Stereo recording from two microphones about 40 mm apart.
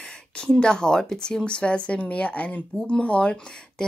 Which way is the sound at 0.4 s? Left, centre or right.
Left.